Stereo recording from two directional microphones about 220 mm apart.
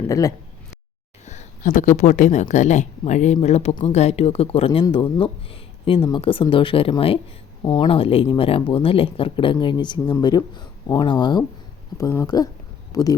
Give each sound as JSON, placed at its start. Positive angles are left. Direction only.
{"t": 0.1, "sound": "speech", "side_deg": 15}
{"t": 1.2, "sound": "a sound", "side_deg": 30}
{"t": 2.0, "sound": "speech", "side_deg": 30}